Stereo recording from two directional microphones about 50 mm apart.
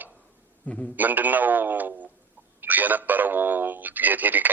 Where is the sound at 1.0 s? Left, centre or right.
Right.